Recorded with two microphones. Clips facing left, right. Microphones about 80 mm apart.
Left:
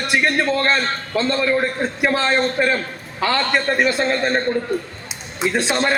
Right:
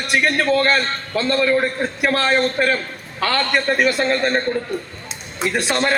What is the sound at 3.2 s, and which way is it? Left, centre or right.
A man's voice, centre.